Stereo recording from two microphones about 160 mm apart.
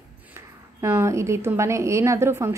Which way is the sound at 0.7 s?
15° right (ahead or behind).